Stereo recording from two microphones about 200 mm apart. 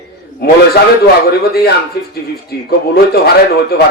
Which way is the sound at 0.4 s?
55° left (ahead or behind).